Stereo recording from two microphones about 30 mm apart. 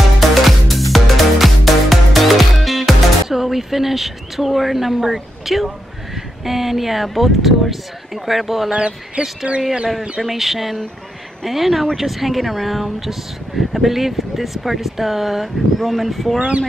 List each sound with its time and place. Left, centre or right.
0.2 s music: centre
3.3 s a woman's voice: centre
8.7 s speech: right
10.2 s speech: centre
16.3 s speech: right